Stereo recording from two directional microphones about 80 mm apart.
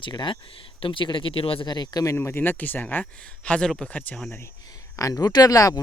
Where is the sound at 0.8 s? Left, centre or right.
Left.